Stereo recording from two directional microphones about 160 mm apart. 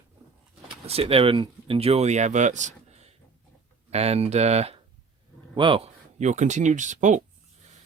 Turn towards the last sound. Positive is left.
turn(degrees=-50)  # may be behind; listen again after turning